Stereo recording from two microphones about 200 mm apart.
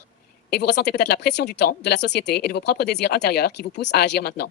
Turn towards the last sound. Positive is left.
turn(degrees=55)  # may be behind; listen again after turning